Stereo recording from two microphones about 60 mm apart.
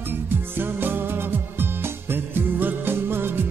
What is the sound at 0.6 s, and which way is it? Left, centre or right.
Music, right.